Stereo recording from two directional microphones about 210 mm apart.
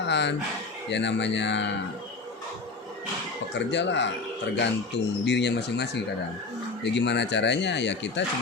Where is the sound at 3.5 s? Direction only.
55° left (ahead or behind).